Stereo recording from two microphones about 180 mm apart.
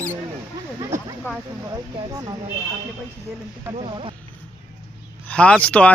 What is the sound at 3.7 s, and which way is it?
Speech, 30° right (ahead or behind).